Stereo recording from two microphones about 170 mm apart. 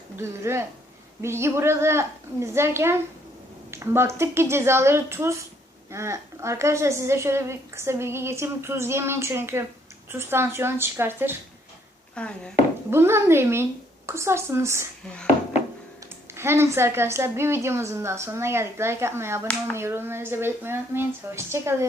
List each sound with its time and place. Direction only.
0.2 s a woman's voice: 15° right (ahead or behind)
12.2 s speech: 5° left (ahead or behind)
12.9 s a woman's voice: 15° right (ahead or behind)
15.0 s speech: 5° left (ahead or behind)
16.3 s a woman's voice: 15° right (ahead or behind)